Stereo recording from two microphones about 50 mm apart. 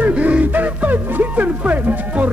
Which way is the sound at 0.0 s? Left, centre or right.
Right.